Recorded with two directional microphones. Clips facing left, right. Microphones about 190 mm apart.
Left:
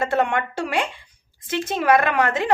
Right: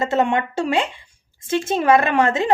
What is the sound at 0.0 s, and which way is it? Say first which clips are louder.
A woman's voice: right 2 dB; 20° right (ahead or behind).